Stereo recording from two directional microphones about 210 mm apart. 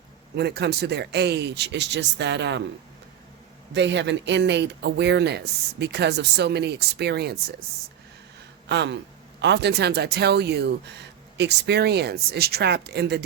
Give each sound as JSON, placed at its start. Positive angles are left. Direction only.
{"t": 0.3, "sound": "speech", "side_deg": -50}
{"t": 3.7, "sound": "speech", "side_deg": -55}
{"t": 8.7, "sound": "speech", "side_deg": -55}